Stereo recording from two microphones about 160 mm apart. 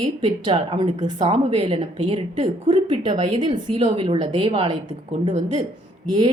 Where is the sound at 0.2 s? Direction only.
30° right (ahead or behind).